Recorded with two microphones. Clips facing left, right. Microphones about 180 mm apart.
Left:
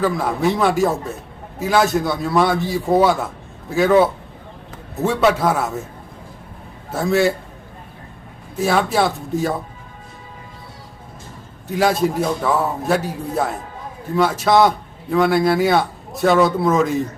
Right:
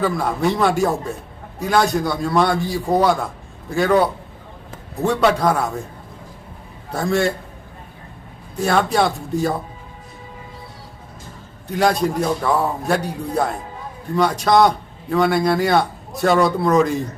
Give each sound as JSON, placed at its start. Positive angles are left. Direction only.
{"t": 0.0, "sound": "a man's voice", "side_deg": 0}
{"t": 6.9, "sound": "a man's voice", "side_deg": 5}
{"t": 8.5, "sound": "a man's voice", "side_deg": 0}
{"t": 11.7, "sound": "a man's voice", "side_deg": 0}